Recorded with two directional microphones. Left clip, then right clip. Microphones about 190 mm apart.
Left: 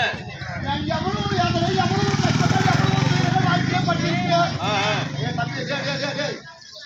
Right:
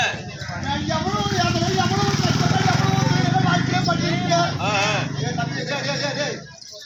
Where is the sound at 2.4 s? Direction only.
50° left (ahead or behind).